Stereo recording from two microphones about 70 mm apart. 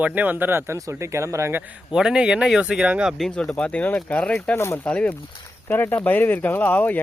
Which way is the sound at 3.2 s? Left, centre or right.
Centre.